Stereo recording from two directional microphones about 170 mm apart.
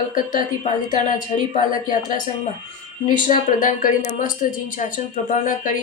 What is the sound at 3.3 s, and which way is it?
A woman's voice, 50° left (ahead or behind).